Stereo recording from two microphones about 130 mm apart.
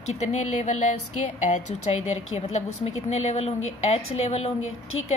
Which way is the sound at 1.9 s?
50° left (ahead or behind).